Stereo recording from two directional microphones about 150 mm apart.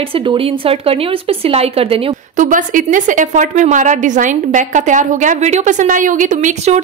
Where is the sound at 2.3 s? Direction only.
60° right (ahead or behind).